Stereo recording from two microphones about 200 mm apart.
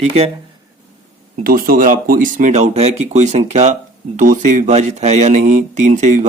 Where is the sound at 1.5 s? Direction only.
45° right (ahead or behind).